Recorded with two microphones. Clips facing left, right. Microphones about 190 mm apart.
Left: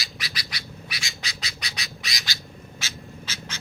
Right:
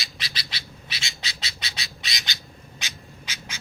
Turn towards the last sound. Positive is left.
turn(degrees=-10)  # may be behind; listen again after turning